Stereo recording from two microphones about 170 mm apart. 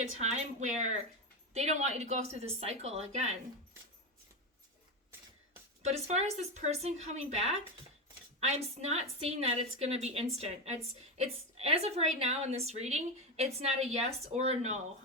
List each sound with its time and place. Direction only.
0.2 s a woman's voice: 40° right (ahead or behind)
5.8 s a woman's voice: 40° right (ahead or behind)